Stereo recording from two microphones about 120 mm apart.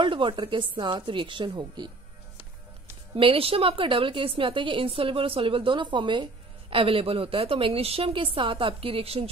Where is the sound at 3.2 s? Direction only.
50° right (ahead or behind).